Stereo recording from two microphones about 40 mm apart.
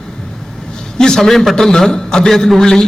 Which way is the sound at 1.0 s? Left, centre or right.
Centre.